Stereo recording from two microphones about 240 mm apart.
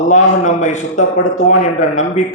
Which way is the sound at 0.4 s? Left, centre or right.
Left.